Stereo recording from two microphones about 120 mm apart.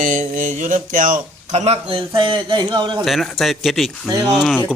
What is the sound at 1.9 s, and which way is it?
Speech, 40° right (ahead or behind).